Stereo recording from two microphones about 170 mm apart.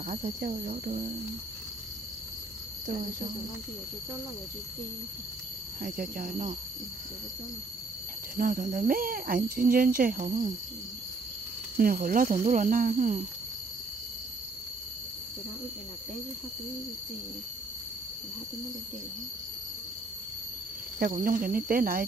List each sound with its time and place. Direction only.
0.0 s speech: 55° right (ahead or behind)
5.8 s speech: 55° right (ahead or behind)
8.4 s speech: 55° right (ahead or behind)
11.7 s speech: 55° right (ahead or behind)
21.2 s speech: 55° right (ahead or behind)